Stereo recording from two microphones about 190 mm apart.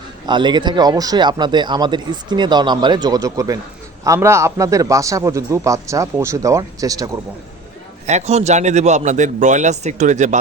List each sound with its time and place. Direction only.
0.3 s a man's voice: 25° right (ahead or behind)
8.0 s a man's voice: 35° right (ahead or behind)